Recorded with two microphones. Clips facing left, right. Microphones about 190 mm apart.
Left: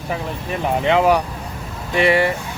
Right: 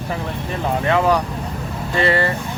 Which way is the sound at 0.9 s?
15° left (ahead or behind).